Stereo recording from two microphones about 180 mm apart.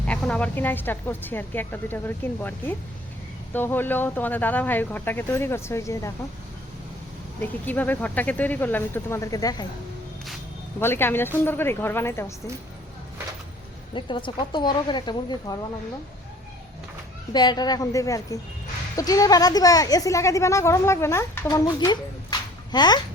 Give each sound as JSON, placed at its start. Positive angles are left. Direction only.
{"t": 0.0, "sound": "a woman's voice", "side_deg": 5}
{"t": 7.4, "sound": "a woman's voice", "side_deg": 10}
{"t": 10.8, "sound": "a woman's voice", "side_deg": 10}
{"t": 13.9, "sound": "a woman's voice", "side_deg": 25}
{"t": 17.3, "sound": "a woman's voice", "side_deg": 25}